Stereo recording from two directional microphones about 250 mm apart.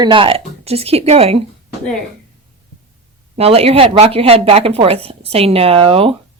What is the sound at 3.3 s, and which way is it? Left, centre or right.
A woman's voice, right.